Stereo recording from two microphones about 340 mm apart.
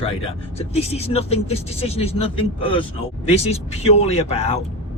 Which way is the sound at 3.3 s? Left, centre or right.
Centre.